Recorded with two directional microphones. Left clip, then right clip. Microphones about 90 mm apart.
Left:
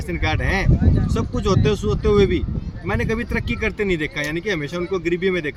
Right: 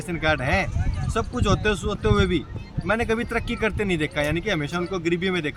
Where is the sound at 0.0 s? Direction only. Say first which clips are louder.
Right 1 dB; 25° right (ahead or behind).